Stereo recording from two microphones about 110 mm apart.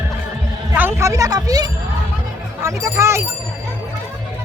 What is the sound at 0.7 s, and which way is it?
Speech, 20° right (ahead or behind).